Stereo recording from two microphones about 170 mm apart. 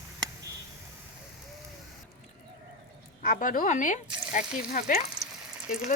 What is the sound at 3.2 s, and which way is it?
Speech, 50° left (ahead or behind).